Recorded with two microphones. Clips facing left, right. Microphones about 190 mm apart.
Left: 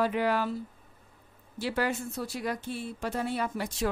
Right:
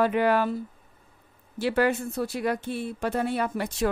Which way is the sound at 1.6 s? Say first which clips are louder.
Right 6 dB; 60° right (ahead or behind).